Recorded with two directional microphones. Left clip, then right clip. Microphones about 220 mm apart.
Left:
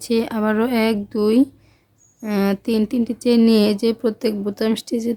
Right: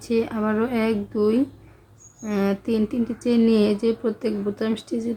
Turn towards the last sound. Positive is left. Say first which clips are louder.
# left 5 dB
turn(degrees=45)  # may be behind; listen again after turning